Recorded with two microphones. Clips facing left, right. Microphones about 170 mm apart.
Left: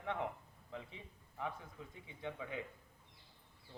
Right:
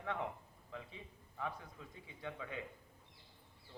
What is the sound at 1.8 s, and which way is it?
Speech, 20° left (ahead or behind).